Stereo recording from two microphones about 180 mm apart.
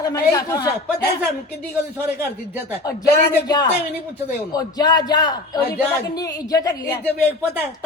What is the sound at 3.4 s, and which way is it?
A man's voice, 20° left (ahead or behind).